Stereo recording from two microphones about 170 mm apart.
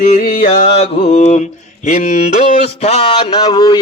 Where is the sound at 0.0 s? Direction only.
55° left (ahead or behind).